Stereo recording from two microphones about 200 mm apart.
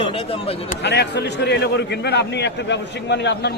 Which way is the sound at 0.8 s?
60° left (ahead or behind).